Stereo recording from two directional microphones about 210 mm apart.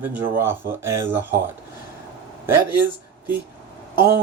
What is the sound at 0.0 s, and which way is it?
Speech, 10° right (ahead or behind).